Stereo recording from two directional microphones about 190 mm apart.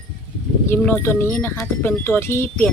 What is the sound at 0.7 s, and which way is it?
Speech, 10° left (ahead or behind).